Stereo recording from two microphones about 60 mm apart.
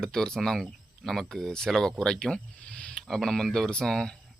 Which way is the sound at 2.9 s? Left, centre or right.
Centre.